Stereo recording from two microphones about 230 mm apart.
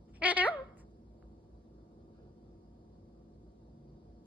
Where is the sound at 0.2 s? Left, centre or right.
Centre.